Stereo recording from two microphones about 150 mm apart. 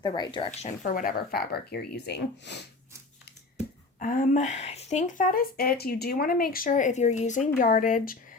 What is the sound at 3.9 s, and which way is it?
A woman's voice, 65° left (ahead or behind).